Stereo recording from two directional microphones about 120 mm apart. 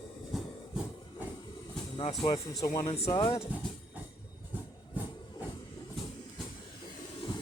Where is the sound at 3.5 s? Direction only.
15° right (ahead or behind).